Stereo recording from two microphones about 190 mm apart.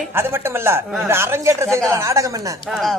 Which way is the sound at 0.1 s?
10° right (ahead or behind).